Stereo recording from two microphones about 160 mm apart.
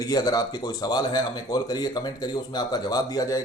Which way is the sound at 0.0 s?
25° left (ahead or behind).